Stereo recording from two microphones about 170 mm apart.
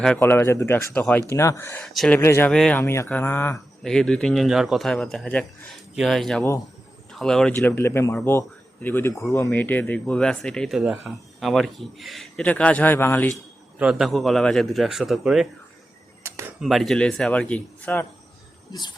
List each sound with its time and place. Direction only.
0.0 s a man's voice: 10° left (ahead or behind)
1.9 s speech: centre (ahead or behind)
2.1 s a man's voice: 15° left (ahead or behind)
7.5 s a man's voice: 15° left (ahead or behind)
13.7 s speech: 5° right (ahead or behind)
16.2 s a sound: 15° right (ahead or behind)
16.6 s speech: centre (ahead or behind)
18.7 s speech: 25° left (ahead or behind)